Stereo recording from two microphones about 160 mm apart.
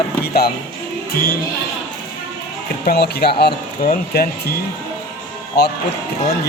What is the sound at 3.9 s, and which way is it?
Speech, 70° left (ahead or behind).